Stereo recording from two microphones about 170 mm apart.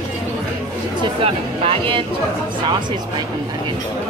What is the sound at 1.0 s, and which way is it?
Speech, 35° right (ahead or behind).